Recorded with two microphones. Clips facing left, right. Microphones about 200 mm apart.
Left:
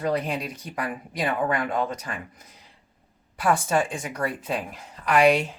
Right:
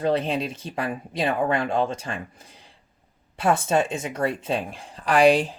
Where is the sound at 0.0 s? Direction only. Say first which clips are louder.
Right 3 dB; 25° right (ahead or behind).